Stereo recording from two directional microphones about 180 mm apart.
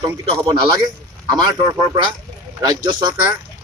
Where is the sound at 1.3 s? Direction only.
25° right (ahead or behind).